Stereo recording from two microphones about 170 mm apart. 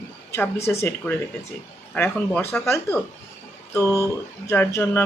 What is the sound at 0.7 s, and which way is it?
Speech, 15° left (ahead or behind).